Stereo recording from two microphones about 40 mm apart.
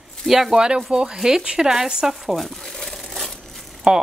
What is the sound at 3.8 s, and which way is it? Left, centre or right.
Speech, centre.